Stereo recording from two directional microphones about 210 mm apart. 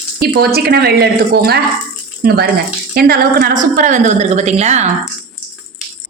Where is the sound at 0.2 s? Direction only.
45° right (ahead or behind).